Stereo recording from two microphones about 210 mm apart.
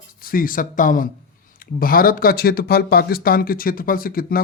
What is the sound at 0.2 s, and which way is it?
Speech, 45° left (ahead or behind).